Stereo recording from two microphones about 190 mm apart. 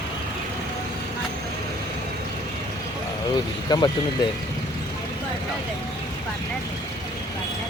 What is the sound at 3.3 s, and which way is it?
Speech, 20° left (ahead or behind).